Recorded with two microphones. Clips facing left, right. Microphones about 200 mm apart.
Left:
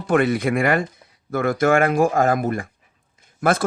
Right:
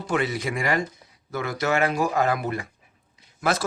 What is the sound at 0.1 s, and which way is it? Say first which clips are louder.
Speech: left 8 dB; 55° left (ahead or behind).